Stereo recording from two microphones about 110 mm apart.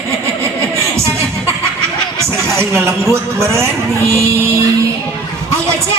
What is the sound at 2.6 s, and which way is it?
Speech, 25° right (ahead or behind).